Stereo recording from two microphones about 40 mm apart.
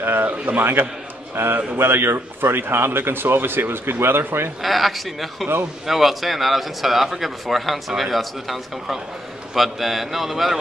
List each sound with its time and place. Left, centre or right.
0.0 s a man's voice: right
0.5 s a man's voice: right
1.3 s a man's voice: right
4.6 s speech: centre